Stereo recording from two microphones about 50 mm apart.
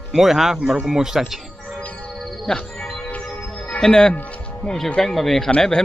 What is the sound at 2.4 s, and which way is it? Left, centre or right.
Music, centre.